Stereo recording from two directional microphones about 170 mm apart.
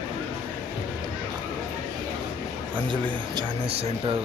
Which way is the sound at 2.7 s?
30° right (ahead or behind).